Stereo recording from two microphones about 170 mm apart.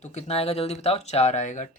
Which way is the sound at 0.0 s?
40° left (ahead or behind).